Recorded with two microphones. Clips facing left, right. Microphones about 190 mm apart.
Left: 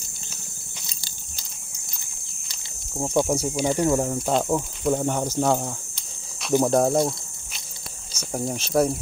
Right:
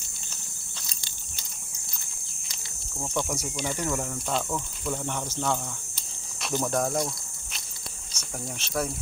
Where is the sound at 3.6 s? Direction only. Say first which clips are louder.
Left 9 dB; 35° left (ahead or behind).